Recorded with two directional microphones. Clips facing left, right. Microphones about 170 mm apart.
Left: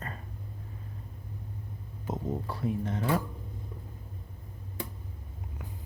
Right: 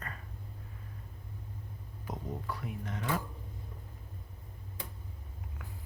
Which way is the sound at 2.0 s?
25° left (ahead or behind).